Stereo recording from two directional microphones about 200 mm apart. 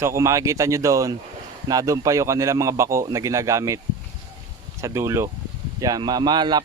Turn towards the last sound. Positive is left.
turn(degrees=-20)  # may be behind; listen again after turning